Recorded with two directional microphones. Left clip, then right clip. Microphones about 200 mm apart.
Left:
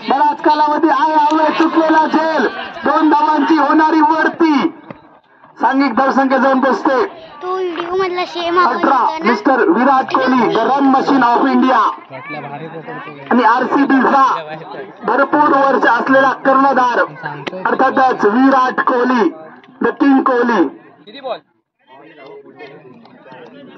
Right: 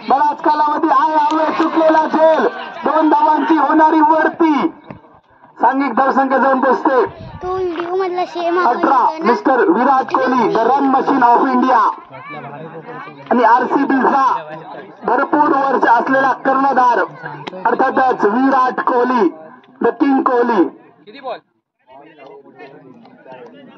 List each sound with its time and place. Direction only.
0.0 s a man's voice: 15° right (ahead or behind)
2.0 s a sound: 15° right (ahead or behind)
3.2 s a sound: 30° right (ahead or behind)
5.6 s a woman's voice: 30° right (ahead or behind)
12.1 s speech: 40° left (ahead or behind)
13.4 s a woman's voice: 30° right (ahead or behind)
17.2 s speech: 40° left (ahead or behind)
17.6 s a woman's voice: 30° right (ahead or behind)
21.1 s a man's voice: 10° left (ahead or behind)